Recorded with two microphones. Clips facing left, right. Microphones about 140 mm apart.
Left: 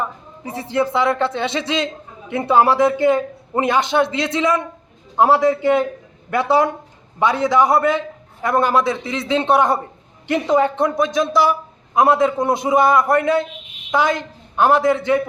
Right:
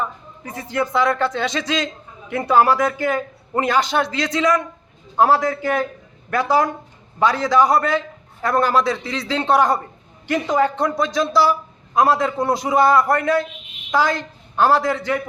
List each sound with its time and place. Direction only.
0.0 s speech: 25° left (ahead or behind)